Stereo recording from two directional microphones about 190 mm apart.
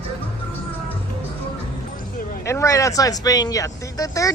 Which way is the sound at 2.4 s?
15° left (ahead or behind).